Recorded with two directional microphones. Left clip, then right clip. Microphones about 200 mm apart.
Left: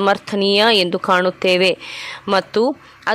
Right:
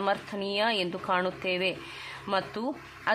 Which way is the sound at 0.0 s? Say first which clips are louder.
Left 13 dB; 45° left (ahead or behind).